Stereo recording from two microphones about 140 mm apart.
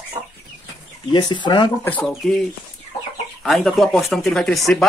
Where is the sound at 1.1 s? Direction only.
30° left (ahead or behind).